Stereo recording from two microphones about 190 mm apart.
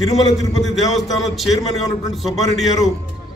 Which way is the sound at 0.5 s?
Centre (ahead or behind).